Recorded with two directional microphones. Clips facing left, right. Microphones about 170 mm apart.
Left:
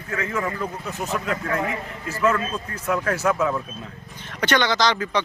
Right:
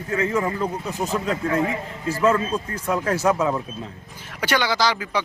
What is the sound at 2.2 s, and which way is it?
Speech, 30° right (ahead or behind).